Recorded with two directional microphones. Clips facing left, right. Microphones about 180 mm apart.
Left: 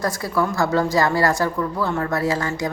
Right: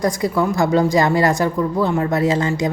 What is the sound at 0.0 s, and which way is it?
A woman's voice, 20° right (ahead or behind).